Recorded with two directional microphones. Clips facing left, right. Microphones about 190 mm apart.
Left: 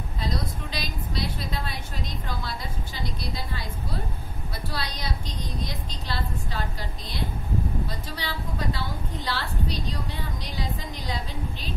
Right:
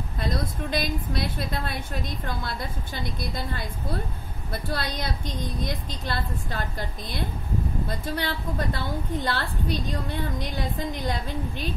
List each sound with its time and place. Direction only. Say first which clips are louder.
0.2 s a woman's voice: right 3 dB; 55° right (ahead or behind)
8.2 s a woman's voice: right 3 dB; 55° right (ahead or behind)